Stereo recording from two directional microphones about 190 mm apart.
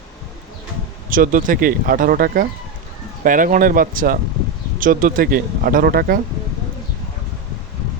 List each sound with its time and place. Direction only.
1.1 s speech: 45° right (ahead or behind)